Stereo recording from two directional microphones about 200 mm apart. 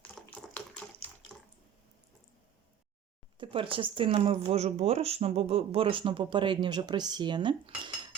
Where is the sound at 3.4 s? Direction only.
25° right (ahead or behind).